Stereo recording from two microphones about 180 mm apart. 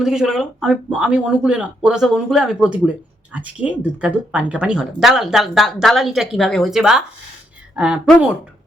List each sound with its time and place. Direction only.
0.0 s a woman's voice: centre (ahead or behind)